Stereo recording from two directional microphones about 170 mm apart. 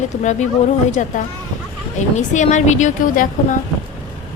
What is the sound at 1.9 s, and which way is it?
A woman's voice, 45° left (ahead or behind).